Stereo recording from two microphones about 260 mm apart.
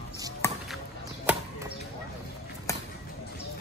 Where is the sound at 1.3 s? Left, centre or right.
Centre.